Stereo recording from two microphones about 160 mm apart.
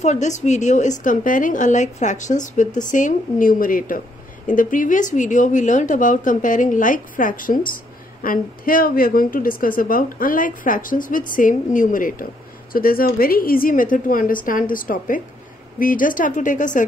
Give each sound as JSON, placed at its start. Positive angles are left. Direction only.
{"t": 0.0, "sound": "a woman's voice", "side_deg": 45}